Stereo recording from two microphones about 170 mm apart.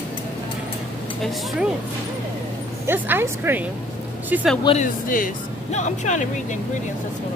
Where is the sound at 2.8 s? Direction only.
10° right (ahead or behind).